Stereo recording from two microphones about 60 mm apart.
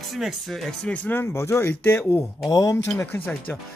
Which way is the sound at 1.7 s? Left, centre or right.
Left.